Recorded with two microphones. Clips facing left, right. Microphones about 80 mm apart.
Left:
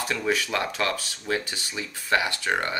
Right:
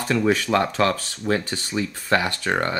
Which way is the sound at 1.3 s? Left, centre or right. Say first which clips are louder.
Right 5 dB; right.